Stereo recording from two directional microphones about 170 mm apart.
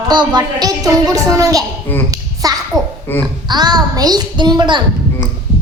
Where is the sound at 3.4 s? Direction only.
25° right (ahead or behind).